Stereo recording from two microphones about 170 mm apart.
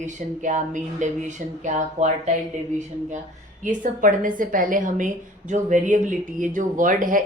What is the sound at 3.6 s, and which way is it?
A woman's voice, 50° right (ahead or behind).